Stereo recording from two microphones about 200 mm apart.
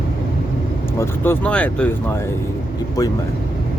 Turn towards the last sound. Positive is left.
turn(degrees=15)  # may be behind; listen again after turning